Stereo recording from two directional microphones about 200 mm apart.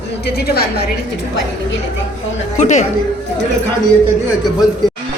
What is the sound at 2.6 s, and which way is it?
Speech, 35° left (ahead or behind).